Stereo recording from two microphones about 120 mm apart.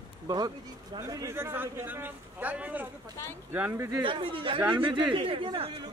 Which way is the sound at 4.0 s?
45° right (ahead or behind).